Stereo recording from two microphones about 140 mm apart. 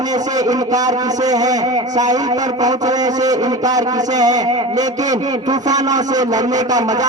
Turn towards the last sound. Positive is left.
turn(degrees=-25)  # may be behind; listen again after turning